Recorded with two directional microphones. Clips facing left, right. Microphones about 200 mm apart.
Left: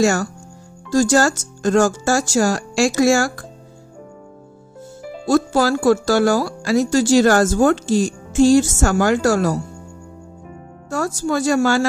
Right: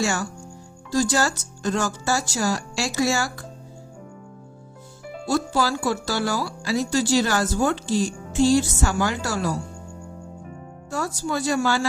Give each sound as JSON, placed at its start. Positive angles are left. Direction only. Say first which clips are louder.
{"t": 0.0, "sound": "speech", "louder": "left 8 dB", "side_deg": 45}
{"t": 5.3, "sound": "speech", "louder": "left 7 dB", "side_deg": 50}
{"t": 10.9, "sound": "speech", "louder": "left 6 dB", "side_deg": 45}